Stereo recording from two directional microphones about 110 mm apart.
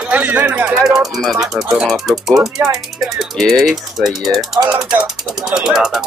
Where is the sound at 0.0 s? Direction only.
15° right (ahead or behind).